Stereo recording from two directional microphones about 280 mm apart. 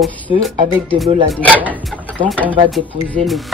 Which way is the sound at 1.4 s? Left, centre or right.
Centre.